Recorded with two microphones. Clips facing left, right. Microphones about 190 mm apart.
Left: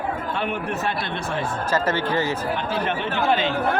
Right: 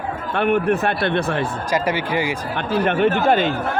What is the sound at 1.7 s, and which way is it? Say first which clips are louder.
Speech: right 2 dB; 10° right (ahead or behind).